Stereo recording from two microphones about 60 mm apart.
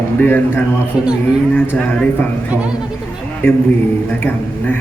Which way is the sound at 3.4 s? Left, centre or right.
Left.